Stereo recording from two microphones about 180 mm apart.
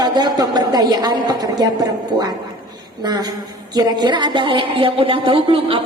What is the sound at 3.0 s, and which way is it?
A woman's voice, 20° right (ahead or behind).